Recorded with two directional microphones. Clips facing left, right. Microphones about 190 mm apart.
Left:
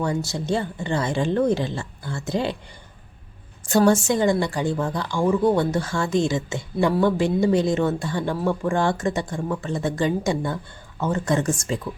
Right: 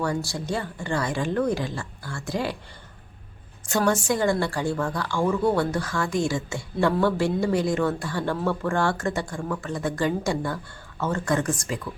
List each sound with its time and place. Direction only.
0.0 s a woman's voice: 20° left (ahead or behind)
3.7 s a woman's voice: 30° left (ahead or behind)